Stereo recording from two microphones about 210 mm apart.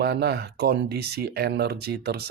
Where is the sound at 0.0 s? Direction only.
50° right (ahead or behind).